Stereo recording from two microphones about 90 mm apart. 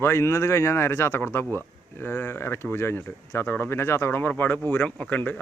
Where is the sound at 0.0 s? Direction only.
30° left (ahead or behind).